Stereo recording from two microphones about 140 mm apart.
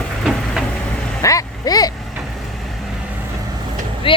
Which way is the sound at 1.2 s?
25° left (ahead or behind).